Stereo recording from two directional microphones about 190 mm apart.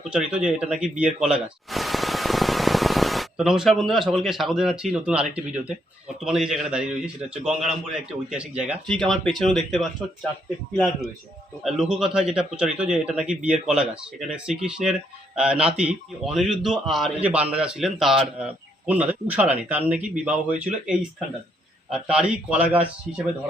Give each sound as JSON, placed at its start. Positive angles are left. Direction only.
{"t": 0.1, "sound": "a man's voice", "side_deg": -5}
{"t": 11.6, "sound": "a man's voice", "side_deg": -5}